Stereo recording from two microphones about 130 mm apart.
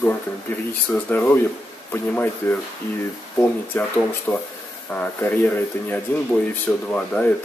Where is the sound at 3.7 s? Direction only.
15° left (ahead or behind).